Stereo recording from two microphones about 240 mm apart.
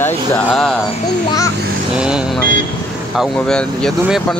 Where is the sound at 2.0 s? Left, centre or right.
Centre.